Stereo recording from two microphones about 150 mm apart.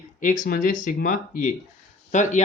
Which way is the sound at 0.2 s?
60° left (ahead or behind).